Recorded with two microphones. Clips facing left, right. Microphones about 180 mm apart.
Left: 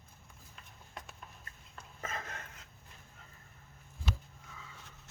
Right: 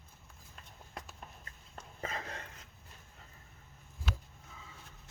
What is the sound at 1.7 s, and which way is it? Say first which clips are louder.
Dog: right 2 dB; 30° right (ahead or behind).